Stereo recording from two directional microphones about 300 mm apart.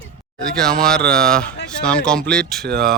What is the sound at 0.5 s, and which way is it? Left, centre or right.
Speech, centre.